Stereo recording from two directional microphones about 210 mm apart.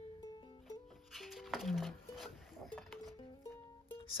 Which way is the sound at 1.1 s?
Centre (ahead or behind).